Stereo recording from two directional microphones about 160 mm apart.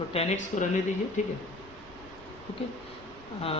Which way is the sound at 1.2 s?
50° left (ahead or behind).